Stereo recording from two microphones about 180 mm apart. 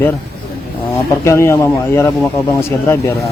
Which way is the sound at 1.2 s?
15° left (ahead or behind).